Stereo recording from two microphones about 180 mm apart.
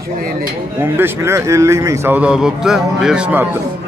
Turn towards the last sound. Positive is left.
turn(degrees=-5)  # may be behind; listen again after turning